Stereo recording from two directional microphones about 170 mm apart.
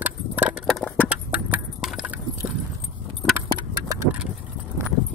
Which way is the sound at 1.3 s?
5° right (ahead or behind).